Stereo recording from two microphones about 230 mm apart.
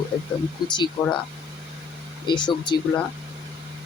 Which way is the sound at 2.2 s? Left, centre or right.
Centre.